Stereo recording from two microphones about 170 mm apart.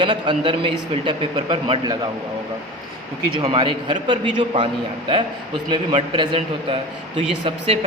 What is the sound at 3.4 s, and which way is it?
Speech, 30° right (ahead or behind).